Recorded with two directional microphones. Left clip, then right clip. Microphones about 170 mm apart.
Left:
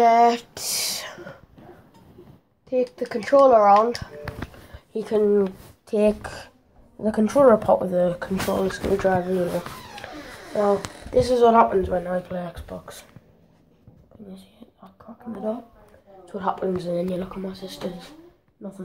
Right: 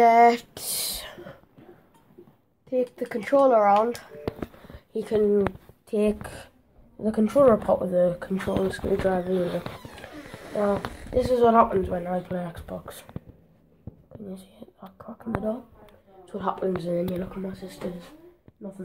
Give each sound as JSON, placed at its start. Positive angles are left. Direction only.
{"t": 0.0, "sound": "speech", "side_deg": -10}
{"t": 2.7, "sound": "speech", "side_deg": -5}
{"t": 4.9, "sound": "speech", "side_deg": 0}
{"t": 11.1, "sound": "speech", "side_deg": 5}
{"t": 14.3, "sound": "whispering", "side_deg": -40}
{"t": 16.3, "sound": "speech", "side_deg": -5}